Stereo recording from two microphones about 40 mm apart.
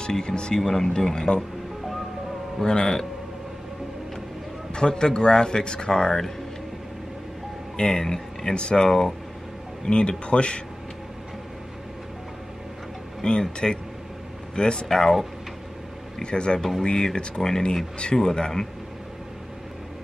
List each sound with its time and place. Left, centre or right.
0.0 s speech: centre
0.6 s speech: centre
2.6 s speech: centre
4.7 s speech: centre
7.7 s speech: centre
13.2 s speech: centre
16.2 s speech: left